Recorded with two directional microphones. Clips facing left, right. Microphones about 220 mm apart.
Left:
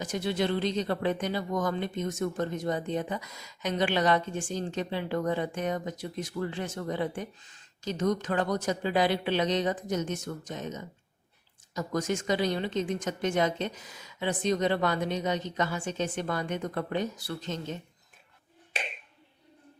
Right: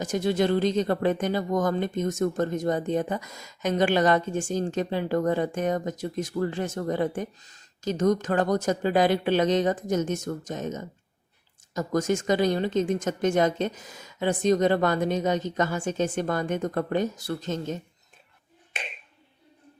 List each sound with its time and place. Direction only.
0.0 s speech: 45° right (ahead or behind)